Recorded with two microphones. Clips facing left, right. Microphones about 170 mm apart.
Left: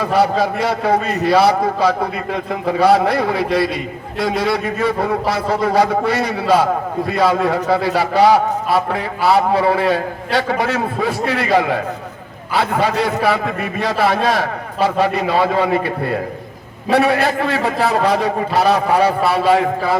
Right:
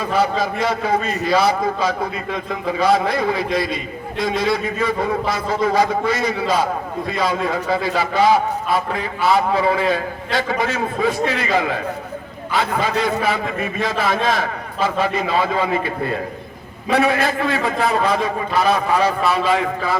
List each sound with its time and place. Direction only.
0.0 s a man's voice: 65° left (ahead or behind)
19.5 s a man's voice: 35° left (ahead or behind)